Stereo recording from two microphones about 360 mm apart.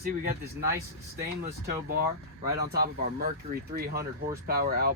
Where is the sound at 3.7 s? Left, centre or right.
Right.